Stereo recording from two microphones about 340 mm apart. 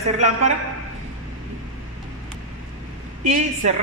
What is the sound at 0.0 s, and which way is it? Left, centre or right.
Speech, centre.